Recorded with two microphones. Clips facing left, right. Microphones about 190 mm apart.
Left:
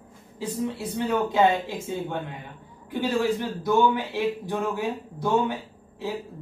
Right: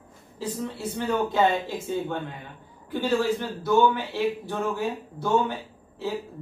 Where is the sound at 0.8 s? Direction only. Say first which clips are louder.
Right 1 dB; 10° left (ahead or behind).